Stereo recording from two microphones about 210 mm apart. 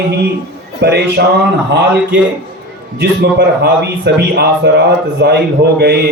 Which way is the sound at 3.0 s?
50° right (ahead or behind).